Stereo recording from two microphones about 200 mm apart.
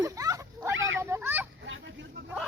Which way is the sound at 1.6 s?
65° right (ahead or behind).